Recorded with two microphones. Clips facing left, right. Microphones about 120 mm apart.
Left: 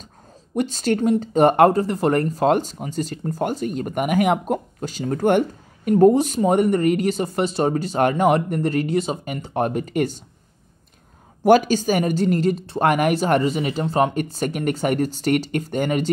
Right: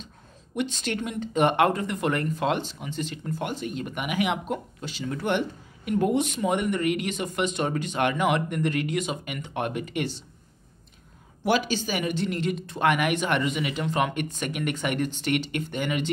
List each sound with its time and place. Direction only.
0.6 s speech: 40° left (ahead or behind)
11.4 s speech: 45° left (ahead or behind)